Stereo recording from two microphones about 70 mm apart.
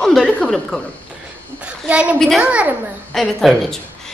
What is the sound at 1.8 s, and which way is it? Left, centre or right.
Speech, centre.